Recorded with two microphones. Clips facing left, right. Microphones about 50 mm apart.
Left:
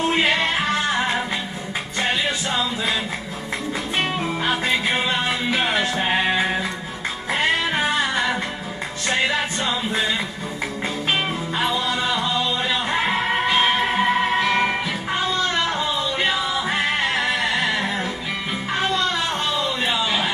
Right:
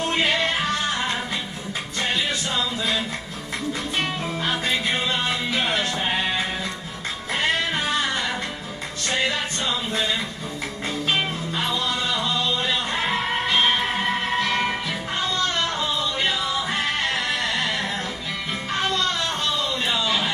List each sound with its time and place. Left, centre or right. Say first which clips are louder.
0.1 s music: left 2 dB; centre
2.5 s music: left 2 dB; centre
4.0 s music: left 5 dB; centre
11.1 s music: left 1 dB; centre
19.8 s a sound: left 1 dB; centre